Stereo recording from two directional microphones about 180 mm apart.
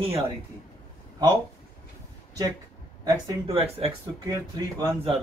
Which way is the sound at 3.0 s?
20° right (ahead or behind).